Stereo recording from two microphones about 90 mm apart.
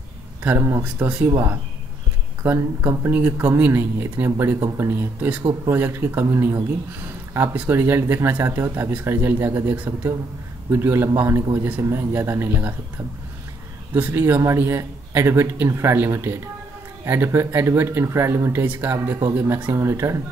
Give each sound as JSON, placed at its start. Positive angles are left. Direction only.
{"t": 0.4, "sound": "speech", "side_deg": -20}
{"t": 0.7, "sound": "speech", "side_deg": -30}
{"t": 1.0, "sound": "speech", "side_deg": -15}
{"t": 2.4, "sound": "speech", "side_deg": -25}
{"t": 7.5, "sound": "speech", "side_deg": -20}
{"t": 13.9, "sound": "a man's voice", "side_deg": -20}